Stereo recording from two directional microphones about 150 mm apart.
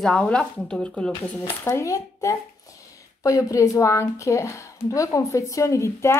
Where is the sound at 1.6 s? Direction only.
20° left (ahead or behind).